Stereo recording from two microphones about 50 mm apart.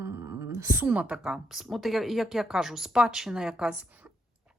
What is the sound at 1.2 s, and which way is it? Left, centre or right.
Speech, centre.